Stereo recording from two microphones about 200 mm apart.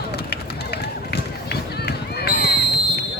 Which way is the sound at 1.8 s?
55° left (ahead or behind).